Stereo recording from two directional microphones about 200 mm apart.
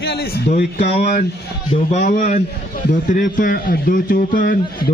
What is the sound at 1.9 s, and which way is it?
A man's voice, 40° left (ahead or behind).